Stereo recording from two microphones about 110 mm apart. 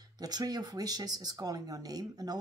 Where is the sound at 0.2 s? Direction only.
35° right (ahead or behind).